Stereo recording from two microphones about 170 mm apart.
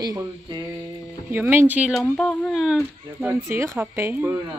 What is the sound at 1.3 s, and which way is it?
Speech, 15° right (ahead or behind).